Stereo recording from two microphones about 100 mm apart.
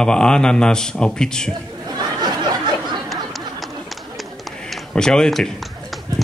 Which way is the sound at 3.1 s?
Centre (ahead or behind).